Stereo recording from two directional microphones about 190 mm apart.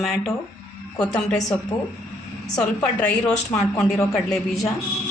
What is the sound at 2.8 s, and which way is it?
A man's voice, 5° left (ahead or behind).